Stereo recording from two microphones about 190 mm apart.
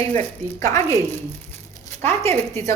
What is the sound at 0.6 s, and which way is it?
Speech, 15° left (ahead or behind).